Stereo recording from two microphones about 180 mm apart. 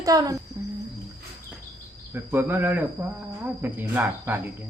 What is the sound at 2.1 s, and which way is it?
Speech, 10° right (ahead or behind).